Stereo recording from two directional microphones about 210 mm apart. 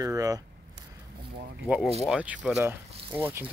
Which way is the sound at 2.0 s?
5° right (ahead or behind).